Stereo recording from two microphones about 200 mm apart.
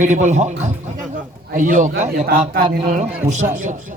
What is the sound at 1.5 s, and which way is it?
Speech, 40° right (ahead or behind).